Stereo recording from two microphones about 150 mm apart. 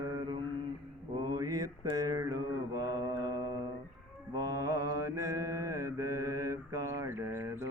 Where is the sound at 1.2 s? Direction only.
30° right (ahead or behind).